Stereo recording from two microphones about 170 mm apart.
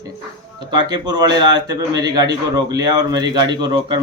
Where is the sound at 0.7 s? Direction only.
25° right (ahead or behind).